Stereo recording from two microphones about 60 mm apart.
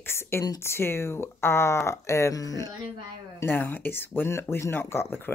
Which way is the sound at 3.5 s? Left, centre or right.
Left.